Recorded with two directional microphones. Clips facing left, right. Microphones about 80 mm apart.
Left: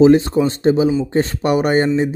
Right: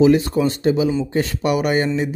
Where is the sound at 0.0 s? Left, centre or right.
Left.